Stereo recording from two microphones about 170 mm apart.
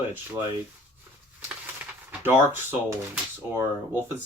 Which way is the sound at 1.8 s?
10° right (ahead or behind).